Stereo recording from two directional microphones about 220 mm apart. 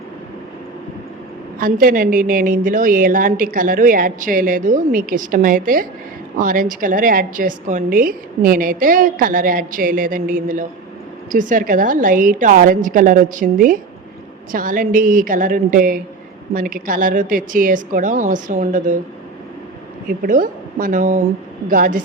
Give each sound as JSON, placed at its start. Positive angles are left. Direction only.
{"t": 1.5, "sound": "a woman's voice", "side_deg": -40}
{"t": 20.1, "sound": "a woman's voice", "side_deg": -40}